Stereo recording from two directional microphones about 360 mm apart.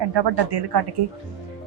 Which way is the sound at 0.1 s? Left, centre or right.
Right.